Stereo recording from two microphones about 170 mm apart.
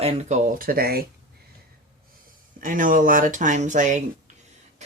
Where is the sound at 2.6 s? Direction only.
50° right (ahead or behind).